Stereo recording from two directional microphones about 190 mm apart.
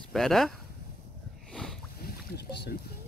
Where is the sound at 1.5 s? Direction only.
5° left (ahead or behind).